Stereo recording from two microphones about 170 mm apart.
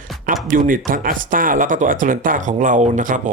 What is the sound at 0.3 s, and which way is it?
Speech, 55° right (ahead or behind).